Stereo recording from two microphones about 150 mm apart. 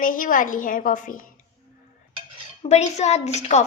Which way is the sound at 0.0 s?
65° left (ahead or behind).